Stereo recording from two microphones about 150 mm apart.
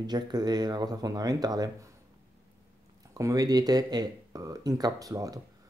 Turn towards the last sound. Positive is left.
turn(degrees=-25)  # may be behind; listen again after turning